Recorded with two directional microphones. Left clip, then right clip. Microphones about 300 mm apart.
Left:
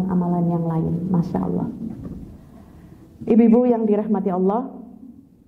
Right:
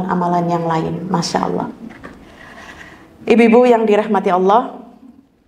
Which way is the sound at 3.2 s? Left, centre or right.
Centre.